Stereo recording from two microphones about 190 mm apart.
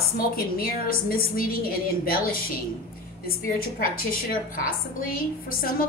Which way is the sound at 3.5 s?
50° left (ahead or behind).